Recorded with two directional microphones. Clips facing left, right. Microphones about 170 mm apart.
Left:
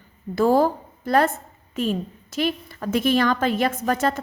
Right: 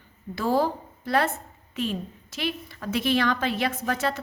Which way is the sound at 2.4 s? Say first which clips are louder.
Left 6 dB; 45° left (ahead or behind).